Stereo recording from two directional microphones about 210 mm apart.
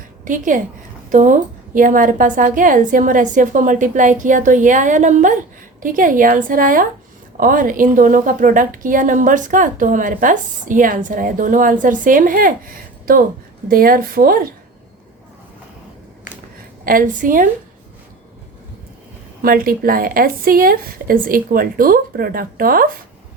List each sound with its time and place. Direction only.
0.3 s a woman's voice: 40° right (ahead or behind)
16.8 s a woman's voice: 40° right (ahead or behind)
19.4 s speech: 45° right (ahead or behind)